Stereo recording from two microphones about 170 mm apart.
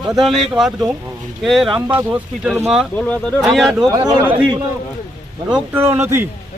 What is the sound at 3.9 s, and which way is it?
Speech, 25° right (ahead or behind).